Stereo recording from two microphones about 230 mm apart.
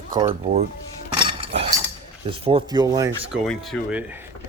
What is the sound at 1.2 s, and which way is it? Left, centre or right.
Cutlery, right.